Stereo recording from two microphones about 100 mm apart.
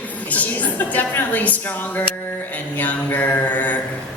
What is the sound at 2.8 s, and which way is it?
Speech, 15° left (ahead or behind).